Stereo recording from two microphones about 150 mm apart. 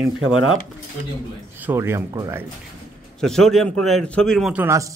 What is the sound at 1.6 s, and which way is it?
Speech, 15° right (ahead or behind).